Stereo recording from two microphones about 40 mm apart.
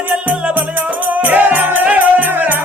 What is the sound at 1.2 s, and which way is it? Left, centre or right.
Music, right.